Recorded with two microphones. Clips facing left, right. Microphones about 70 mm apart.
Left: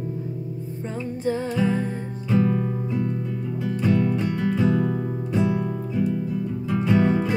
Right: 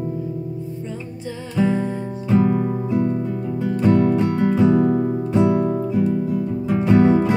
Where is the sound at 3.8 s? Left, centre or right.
Right.